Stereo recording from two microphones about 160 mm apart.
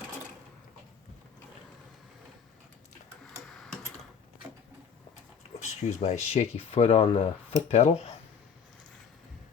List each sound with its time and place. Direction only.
3.5 s tick-tock: centre (ahead or behind)
5.6 s speech: 50° left (ahead or behind)